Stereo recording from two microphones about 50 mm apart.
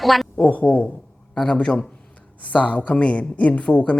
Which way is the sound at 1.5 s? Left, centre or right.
Left.